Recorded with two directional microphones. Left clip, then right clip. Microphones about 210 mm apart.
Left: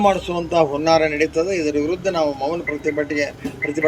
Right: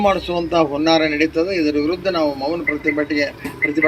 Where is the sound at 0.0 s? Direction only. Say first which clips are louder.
Even; 40° left (ahead or behind).